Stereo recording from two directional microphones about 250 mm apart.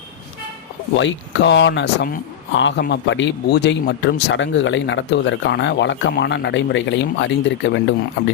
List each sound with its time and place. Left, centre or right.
0.9 s speech: left